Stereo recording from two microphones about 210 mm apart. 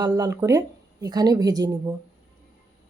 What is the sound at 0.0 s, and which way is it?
A woman's voice, 20° right (ahead or behind).